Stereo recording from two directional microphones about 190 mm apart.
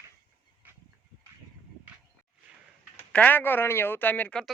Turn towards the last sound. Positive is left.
turn(degrees=5)  # may be behind; listen again after turning